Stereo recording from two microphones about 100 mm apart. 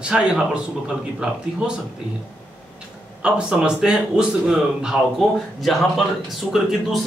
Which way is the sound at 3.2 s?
10° right (ahead or behind).